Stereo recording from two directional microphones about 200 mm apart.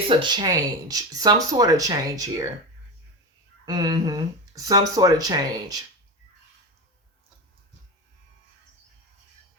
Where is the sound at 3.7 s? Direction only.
20° right (ahead or behind).